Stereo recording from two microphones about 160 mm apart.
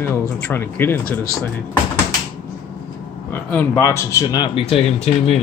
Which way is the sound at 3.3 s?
10° left (ahead or behind).